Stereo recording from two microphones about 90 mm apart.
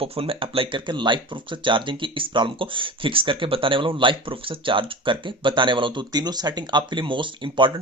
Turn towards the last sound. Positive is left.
turn(degrees=-65)  # may be behind; listen again after turning